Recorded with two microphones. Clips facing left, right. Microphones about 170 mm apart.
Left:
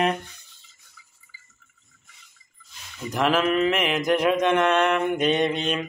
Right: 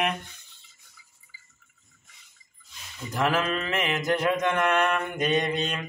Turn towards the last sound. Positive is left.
turn(degrees=20)  # may be behind; listen again after turning